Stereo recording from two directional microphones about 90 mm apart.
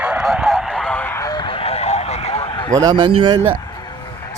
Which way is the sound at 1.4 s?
85° left.